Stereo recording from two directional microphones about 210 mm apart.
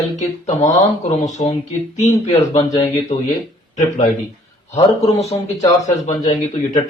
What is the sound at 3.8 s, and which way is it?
Speech, 35° left (ahead or behind).